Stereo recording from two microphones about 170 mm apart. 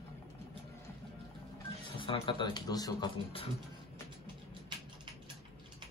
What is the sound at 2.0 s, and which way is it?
Speech, 30° left (ahead or behind).